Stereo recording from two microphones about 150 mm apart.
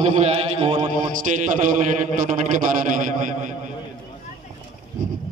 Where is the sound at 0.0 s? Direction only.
50° right (ahead or behind).